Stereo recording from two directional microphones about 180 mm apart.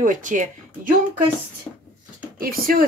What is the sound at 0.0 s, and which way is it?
Speech, 45° right (ahead or behind).